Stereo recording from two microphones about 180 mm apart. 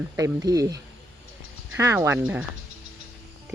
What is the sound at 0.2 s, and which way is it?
Speech, 20° right (ahead or behind).